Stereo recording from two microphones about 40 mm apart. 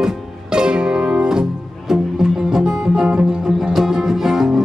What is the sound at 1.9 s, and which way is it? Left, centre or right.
Music, centre.